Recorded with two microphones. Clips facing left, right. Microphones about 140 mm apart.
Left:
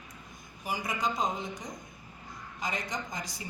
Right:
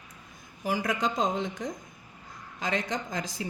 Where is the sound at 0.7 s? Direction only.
90° right.